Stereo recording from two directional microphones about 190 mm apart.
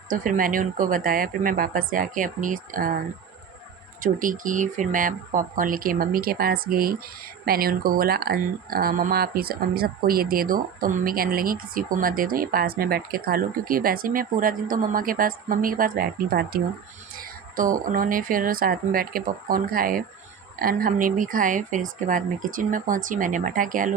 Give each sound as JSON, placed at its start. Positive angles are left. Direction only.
{"t": 0.1, "sound": "speech", "side_deg": -45}
{"t": 4.0, "sound": "speech", "side_deg": -45}